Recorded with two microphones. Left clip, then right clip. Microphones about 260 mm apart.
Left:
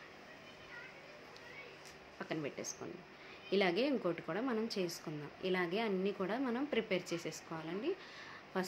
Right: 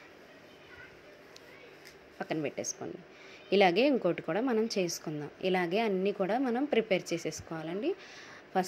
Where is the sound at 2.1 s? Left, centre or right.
Right.